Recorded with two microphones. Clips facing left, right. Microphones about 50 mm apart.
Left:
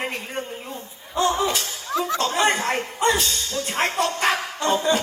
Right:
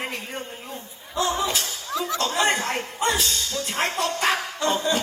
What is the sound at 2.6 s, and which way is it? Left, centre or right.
Music, left.